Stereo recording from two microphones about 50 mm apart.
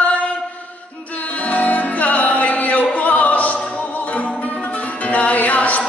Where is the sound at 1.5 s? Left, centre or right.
Left.